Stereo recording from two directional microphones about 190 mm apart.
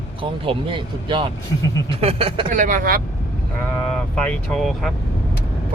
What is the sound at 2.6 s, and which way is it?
Speech, 45° right (ahead or behind).